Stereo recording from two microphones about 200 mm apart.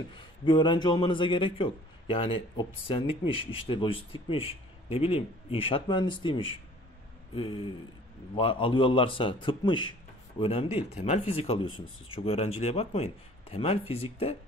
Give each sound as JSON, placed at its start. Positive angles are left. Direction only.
{"t": 0.5, "sound": "a man's voice", "side_deg": 25}